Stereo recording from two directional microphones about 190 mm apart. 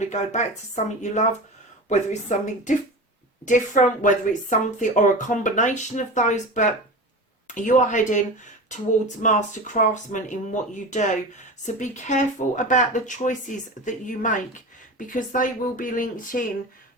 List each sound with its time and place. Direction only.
0.0 s speech: 40° left (ahead or behind)